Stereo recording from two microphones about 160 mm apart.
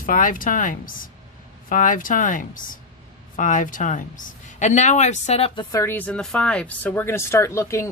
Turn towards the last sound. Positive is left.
turn(degrees=15)  # may be behind; listen again after turning